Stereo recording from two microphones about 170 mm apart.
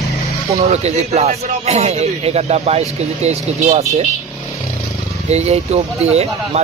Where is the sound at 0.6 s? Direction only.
40° right (ahead or behind).